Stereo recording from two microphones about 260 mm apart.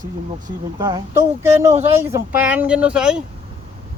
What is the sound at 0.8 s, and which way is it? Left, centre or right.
Speech, centre.